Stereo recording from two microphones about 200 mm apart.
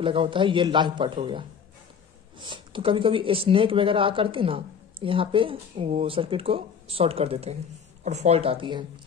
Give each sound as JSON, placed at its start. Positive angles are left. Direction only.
{"t": 0.0, "sound": "speech", "side_deg": -25}